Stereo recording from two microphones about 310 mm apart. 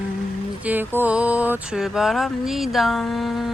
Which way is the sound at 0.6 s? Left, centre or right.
Centre.